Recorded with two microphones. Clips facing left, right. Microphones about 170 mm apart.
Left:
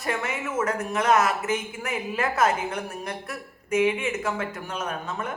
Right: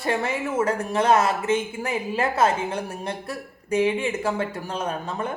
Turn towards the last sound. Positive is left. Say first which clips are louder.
# right 3 dB
turn(degrees=-30)  # may be behind; listen again after turning